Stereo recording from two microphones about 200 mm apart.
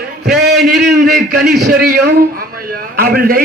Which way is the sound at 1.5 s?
50° right (ahead or behind).